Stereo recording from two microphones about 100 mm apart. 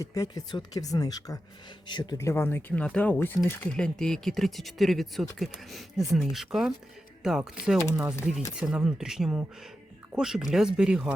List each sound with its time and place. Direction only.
0.0 s speech: 35° left (ahead or behind)
2.1 s speech: 25° left (ahead or behind)
3.8 s speech: 5° left (ahead or behind)